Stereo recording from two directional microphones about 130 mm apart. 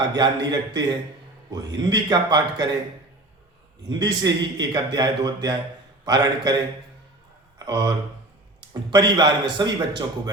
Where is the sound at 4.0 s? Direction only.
30° right (ahead or behind).